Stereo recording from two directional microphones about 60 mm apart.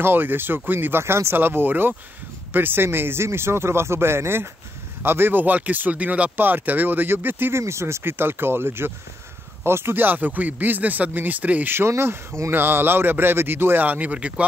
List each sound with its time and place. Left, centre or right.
0.0 s speech: right
7.6 s speech: right
11.9 s speech: right
13.8 s speech: right